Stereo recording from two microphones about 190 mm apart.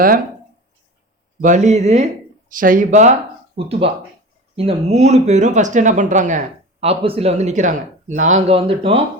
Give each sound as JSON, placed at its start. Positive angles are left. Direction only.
{"t": 1.4, "sound": "speech", "side_deg": -40}